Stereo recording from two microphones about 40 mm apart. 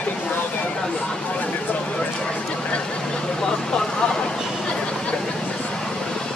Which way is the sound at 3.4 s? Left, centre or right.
Centre.